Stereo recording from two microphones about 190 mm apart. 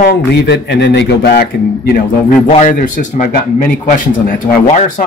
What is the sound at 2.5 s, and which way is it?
Speech, 40° left (ahead or behind).